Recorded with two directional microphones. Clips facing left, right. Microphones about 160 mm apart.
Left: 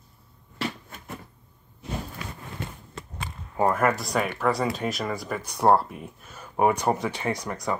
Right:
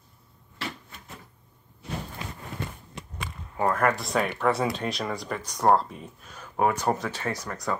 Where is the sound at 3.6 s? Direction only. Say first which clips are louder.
Left 1 dB; 5° left (ahead or behind).